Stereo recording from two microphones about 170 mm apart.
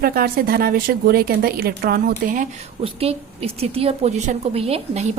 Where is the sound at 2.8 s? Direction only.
35° right (ahead or behind).